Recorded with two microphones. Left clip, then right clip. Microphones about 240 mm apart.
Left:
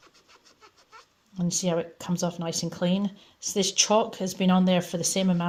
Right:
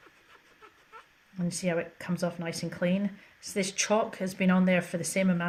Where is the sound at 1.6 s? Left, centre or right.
Left.